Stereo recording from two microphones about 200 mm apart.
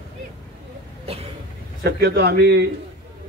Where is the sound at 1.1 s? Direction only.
30° right (ahead or behind).